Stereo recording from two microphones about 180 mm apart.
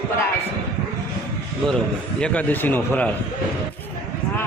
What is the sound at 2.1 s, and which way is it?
Speech, 5° left (ahead or behind).